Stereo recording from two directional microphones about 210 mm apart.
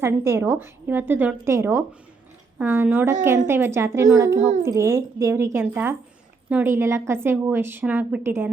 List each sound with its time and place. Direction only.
0.0 s a woman's voice: 10° right (ahead or behind)
4.4 s a child's voice: 35° right (ahead or behind)
4.6 s a woman's voice: 15° right (ahead or behind)